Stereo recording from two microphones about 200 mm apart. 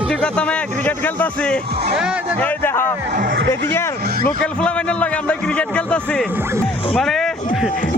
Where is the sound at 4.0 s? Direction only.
50° right (ahead or behind).